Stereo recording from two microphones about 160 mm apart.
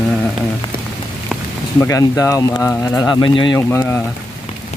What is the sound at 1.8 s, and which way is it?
Speech, 20° left (ahead or behind).